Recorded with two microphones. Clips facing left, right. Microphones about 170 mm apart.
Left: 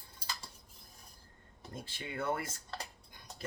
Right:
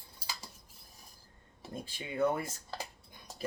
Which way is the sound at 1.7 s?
15° right (ahead or behind).